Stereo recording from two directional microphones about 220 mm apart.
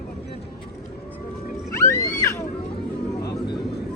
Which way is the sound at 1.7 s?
15° left (ahead or behind).